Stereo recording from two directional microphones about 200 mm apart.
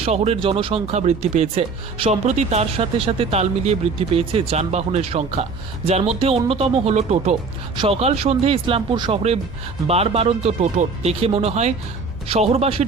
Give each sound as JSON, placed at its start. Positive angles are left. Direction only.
{"t": 0.0, "sound": "speech", "side_deg": -30}